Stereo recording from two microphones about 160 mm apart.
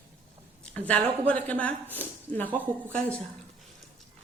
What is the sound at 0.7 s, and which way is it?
A woman's voice, 10° left (ahead or behind).